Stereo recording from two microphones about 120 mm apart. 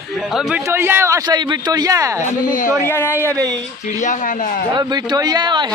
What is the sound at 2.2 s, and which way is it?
Speech, 90° left.